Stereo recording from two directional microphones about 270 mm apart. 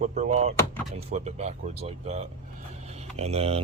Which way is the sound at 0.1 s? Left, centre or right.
Right.